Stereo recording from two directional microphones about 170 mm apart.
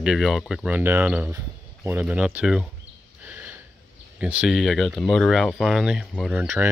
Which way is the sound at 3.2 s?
10° right (ahead or behind).